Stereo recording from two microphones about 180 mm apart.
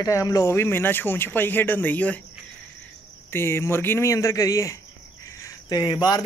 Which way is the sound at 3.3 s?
15° left (ahead or behind).